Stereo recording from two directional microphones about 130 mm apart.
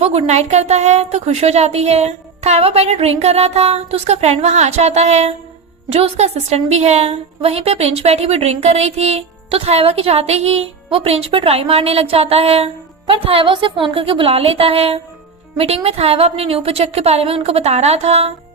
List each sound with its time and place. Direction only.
0.0 s a woman's voice: 55° right (ahead or behind)